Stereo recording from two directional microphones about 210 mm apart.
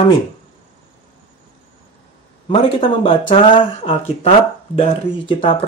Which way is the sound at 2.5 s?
25° left (ahead or behind).